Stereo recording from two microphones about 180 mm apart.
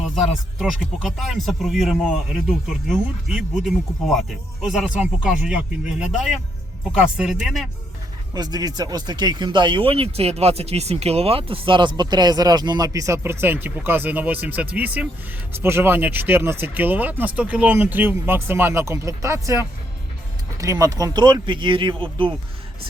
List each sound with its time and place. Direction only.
0.2 s speech: centre (ahead or behind)
8.3 s speech: 20° right (ahead or behind)